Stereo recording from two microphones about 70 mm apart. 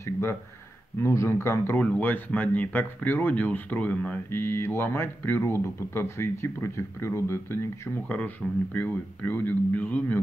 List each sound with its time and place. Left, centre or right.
0.0 s speech: left
1.8 s speech: left
4.3 s speech: left
8.4 s speech: centre
8.7 s speech: left